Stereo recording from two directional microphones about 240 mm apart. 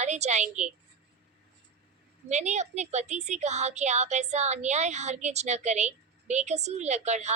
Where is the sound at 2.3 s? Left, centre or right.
Right.